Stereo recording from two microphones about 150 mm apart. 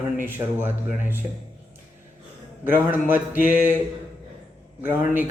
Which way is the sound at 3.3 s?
65° left (ahead or behind).